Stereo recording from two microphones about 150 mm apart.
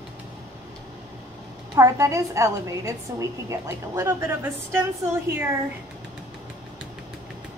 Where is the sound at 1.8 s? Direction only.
20° right (ahead or behind).